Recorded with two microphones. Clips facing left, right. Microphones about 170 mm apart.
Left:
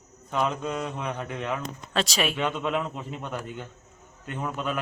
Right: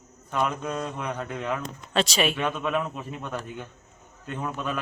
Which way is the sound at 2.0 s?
Centre (ahead or behind).